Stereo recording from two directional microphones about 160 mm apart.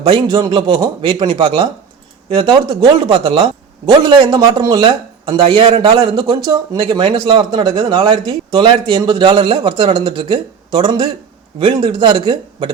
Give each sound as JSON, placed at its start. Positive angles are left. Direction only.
{"t": 0.0, "sound": "a man's voice", "side_deg": -30}